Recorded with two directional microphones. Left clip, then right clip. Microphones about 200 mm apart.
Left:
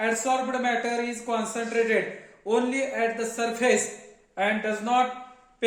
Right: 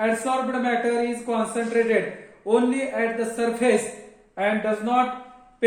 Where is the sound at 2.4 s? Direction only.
35° left (ahead or behind).